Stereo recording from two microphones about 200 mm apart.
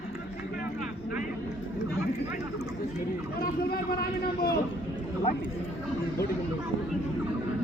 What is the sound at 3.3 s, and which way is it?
Vehicle, 50° left (ahead or behind).